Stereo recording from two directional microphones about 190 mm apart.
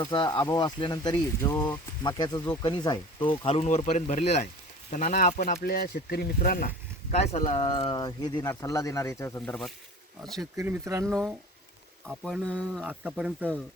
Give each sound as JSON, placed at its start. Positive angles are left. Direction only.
{"t": 0.0, "sound": "speech", "side_deg": 20}
{"t": 5.6, "sound": "speech", "side_deg": 50}
{"t": 7.2, "sound": "speech", "side_deg": 35}
{"t": 10.6, "sound": "speech", "side_deg": -15}
{"t": 12.5, "sound": "speech", "side_deg": 5}
{"t": 12.9, "sound": "speech", "side_deg": -5}